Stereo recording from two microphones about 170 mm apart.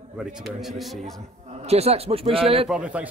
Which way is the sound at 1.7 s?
35° right (ahead or behind).